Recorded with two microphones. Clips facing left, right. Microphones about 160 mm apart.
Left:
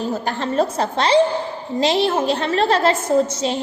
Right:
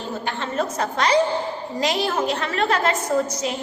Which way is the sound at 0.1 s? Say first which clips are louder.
Left 5 dB; 40° left (ahead or behind).